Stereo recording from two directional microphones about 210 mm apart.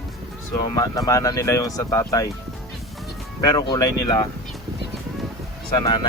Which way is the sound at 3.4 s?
20° left (ahead or behind).